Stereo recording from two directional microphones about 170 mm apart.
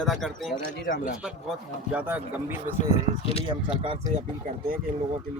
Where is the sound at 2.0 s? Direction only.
10° right (ahead or behind).